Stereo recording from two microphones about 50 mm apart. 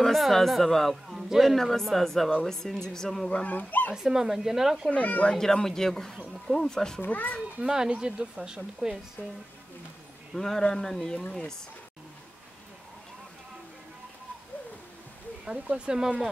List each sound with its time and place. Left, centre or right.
0.0 s speech: centre
1.0 s a sound: centre
1.4 s speech: centre
3.3 s speech: left
3.9 s speech: centre
4.9 s speech: left
5.3 s speech: centre
7.0 s speech: left
7.6 s speech: centre
10.3 s speech: centre
15.6 s speech: right